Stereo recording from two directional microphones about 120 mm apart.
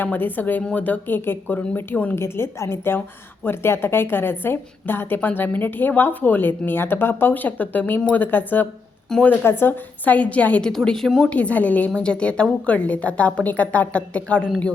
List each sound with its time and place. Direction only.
0.0 s a woman's voice: 15° left (ahead or behind)